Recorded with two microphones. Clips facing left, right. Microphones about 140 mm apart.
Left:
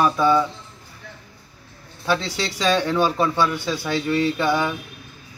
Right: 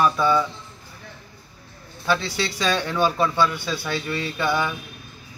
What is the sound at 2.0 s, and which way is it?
A man's voice, 15° left (ahead or behind).